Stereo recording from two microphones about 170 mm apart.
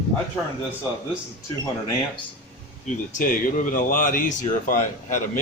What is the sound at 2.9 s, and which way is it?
Speech, 50° left (ahead or behind).